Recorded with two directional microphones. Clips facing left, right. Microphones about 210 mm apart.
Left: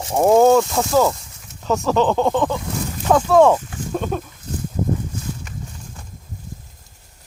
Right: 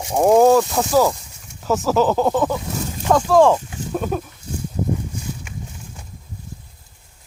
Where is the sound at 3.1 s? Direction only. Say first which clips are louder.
Left 1 dB; 5° left (ahead or behind).